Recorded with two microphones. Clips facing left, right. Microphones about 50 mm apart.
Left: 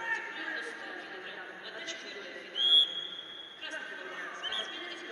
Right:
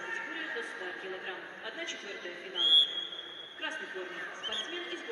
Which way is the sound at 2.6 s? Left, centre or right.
Centre.